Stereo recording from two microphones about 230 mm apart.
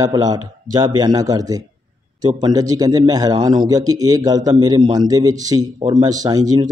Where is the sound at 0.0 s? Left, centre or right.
Centre.